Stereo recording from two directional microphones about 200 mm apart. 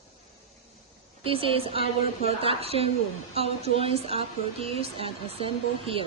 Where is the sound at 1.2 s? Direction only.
25° right (ahead or behind).